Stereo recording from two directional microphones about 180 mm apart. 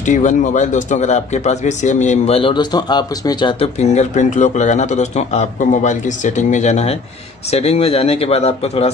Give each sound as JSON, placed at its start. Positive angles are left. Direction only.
{"t": 0.0, "sound": "speech", "side_deg": 45}